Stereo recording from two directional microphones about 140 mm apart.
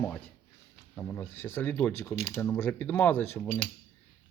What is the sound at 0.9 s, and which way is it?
Speech, 15° left (ahead or behind).